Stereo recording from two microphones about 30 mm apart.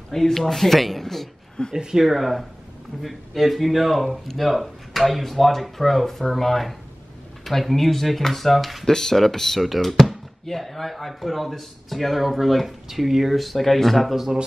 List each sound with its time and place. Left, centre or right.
0.1 s speech: centre
1.8 s speech: centre
2.0 s speech: centre
8.8 s speech: centre
14.1 s speech: centre